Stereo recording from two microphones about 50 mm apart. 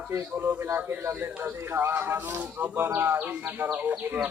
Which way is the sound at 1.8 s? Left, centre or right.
Right.